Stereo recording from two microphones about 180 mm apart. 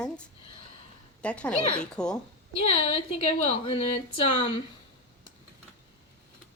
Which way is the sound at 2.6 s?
35° left (ahead or behind).